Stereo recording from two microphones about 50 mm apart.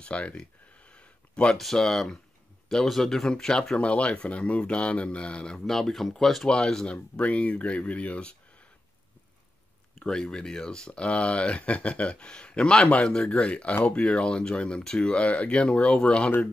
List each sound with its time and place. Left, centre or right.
0.0 s speech: left
0.8 s a sound: left
1.6 s speech: centre
3.7 s speech: left
5.7 s speech: centre
7.2 s speech: left
10.0 s speech: centre